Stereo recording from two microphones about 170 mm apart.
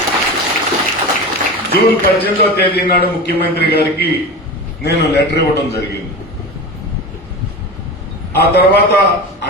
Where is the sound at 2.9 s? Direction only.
65° left (ahead or behind).